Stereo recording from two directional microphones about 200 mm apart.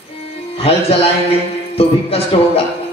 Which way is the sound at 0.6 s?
30° left (ahead or behind).